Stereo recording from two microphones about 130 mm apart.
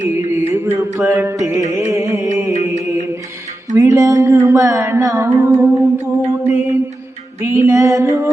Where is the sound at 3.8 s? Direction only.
25° right (ahead or behind).